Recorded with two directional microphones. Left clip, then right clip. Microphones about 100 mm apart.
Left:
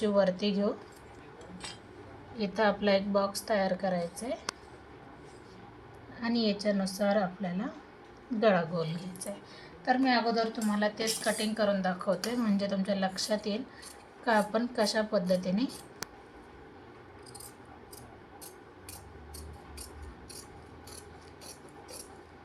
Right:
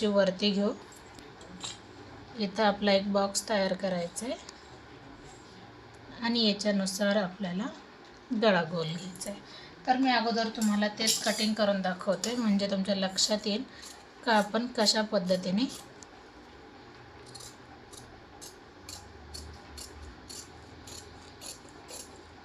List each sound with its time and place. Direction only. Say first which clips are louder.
0.0 s a woman's voice: right 1 dB; 25° right (ahead or behind)
2.4 s a woman's voice: right 1 dB; centre (ahead or behind)
6.1 s a woman's voice: right 3 dB; 15° right (ahead or behind)
8.7 s a woman's voice: even; 10° right (ahead or behind)
9.3 s a woman's voice: left 1 dB; centre (ahead or behind)
9.8 s a woman's voice: right 1 dB; 35° left (ahead or behind)
10.7 s a woman's voice: right 1 dB; 20° left (ahead or behind); by 15.6 s 15° right (ahead or behind)